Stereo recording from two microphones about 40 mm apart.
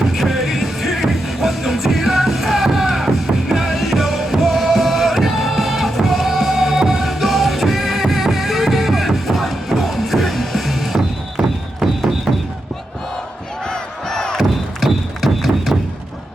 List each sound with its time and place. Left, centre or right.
0.0 s music: centre
13.7 s crowd: centre
14.3 s music: centre